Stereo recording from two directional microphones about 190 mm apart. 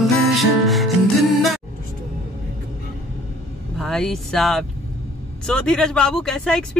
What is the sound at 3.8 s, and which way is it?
Speech, centre (ahead or behind).